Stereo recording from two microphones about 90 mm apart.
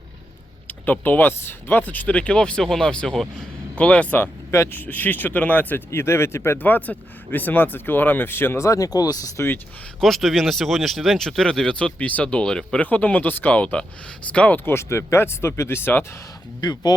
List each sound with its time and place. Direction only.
0.7 s speech: 20° left (ahead or behind)
4.5 s speech: 30° left (ahead or behind)
4.8 s speech: 20° left (ahead or behind); by 9.3 s 45° left (ahead or behind)
10.0 s speech: centre (ahead or behind); by 16.0 s 25° left (ahead or behind)
16.6 s speech: 50° left (ahead or behind)